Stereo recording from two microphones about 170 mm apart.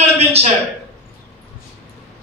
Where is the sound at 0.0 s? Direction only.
35° right (ahead or behind).